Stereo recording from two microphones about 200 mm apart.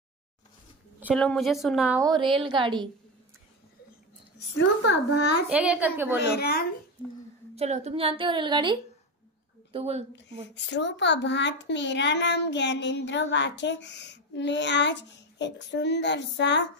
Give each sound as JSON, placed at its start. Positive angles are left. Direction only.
{"t": 1.0, "sound": "a woman's voice", "side_deg": 5}
{"t": 2.0, "sound": "a woman's voice", "side_deg": -25}
{"t": 4.6, "sound": "a child's voice", "side_deg": 60}
{"t": 5.5, "sound": "a woman's voice", "side_deg": -5}
{"t": 6.2, "sound": "a woman's voice", "side_deg": 50}
{"t": 7.5, "sound": "a woman's voice", "side_deg": -35}
{"t": 10.5, "sound": "a child's voice", "side_deg": 60}